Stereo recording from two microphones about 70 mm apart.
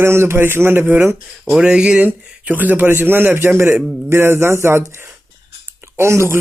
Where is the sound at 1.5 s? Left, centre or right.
Centre.